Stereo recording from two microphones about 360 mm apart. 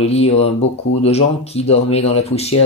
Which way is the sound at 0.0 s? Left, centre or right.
Centre.